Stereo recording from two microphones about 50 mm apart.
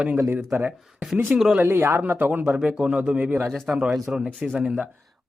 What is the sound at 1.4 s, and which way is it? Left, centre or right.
Speech, centre.